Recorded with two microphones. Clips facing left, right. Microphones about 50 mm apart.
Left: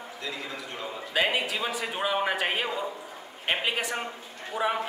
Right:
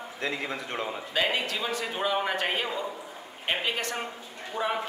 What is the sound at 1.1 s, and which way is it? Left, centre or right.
A man's voice, centre.